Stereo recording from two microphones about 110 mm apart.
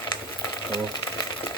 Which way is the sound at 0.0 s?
40° left (ahead or behind).